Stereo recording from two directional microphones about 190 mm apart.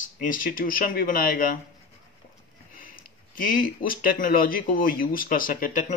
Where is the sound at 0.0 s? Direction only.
45° left (ahead or behind).